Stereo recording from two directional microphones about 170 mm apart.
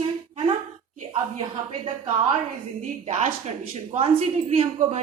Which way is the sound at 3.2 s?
40° right (ahead or behind).